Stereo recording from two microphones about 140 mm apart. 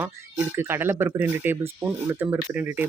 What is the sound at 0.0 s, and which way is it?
Speech, 15° right (ahead or behind).